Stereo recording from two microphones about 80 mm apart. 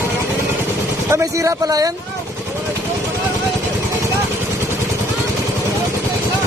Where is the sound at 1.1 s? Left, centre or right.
Right.